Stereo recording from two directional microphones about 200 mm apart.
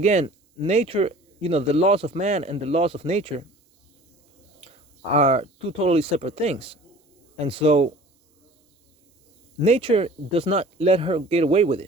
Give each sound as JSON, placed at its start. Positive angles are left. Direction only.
{"t": 0.0, "sound": "speech", "side_deg": -35}
{"t": 5.1, "sound": "speech", "side_deg": -30}
{"t": 9.6, "sound": "speech", "side_deg": -30}